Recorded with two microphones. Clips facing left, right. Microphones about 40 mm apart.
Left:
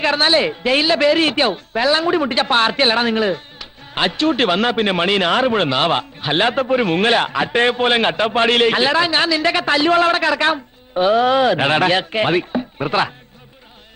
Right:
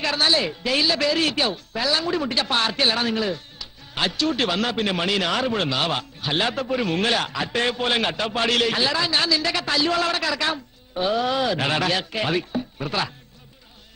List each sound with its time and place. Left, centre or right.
0.0 s speech: left